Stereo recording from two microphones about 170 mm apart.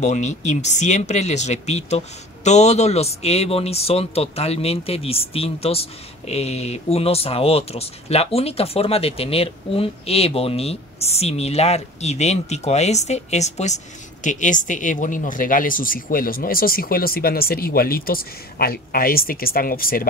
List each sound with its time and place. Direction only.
0.0 s speech: 45° left (ahead or behind); by 20.1 s 60° left (ahead or behind)